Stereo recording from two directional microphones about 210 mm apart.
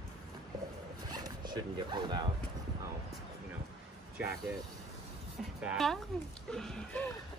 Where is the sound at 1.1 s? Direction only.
20° right (ahead or behind).